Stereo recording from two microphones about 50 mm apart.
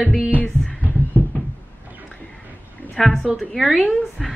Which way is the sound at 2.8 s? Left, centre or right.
Right.